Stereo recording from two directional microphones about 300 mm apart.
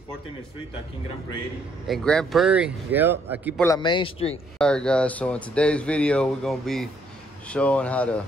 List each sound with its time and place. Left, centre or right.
1.9 s speech: centre
3.6 s speech: centre
4.6 s speech: centre